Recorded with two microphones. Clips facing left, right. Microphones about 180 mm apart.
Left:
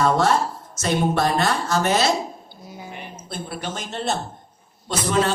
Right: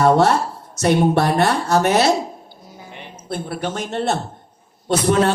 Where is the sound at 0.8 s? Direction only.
65° right (ahead or behind).